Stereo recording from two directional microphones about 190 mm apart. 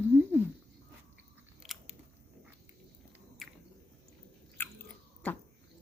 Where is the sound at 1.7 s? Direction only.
Centre (ahead or behind).